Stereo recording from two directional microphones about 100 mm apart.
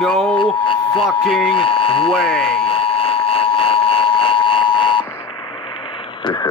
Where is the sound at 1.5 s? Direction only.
65° left (ahead or behind).